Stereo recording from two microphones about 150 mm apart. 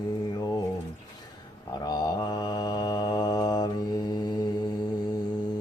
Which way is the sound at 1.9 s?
30° left (ahead or behind).